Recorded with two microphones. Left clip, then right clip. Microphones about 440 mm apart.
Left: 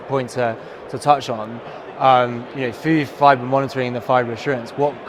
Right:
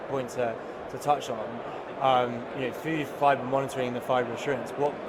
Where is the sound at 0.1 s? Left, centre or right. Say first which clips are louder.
Left 9 dB; left.